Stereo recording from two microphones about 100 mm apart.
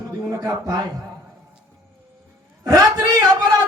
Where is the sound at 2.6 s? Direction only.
35° right (ahead or behind).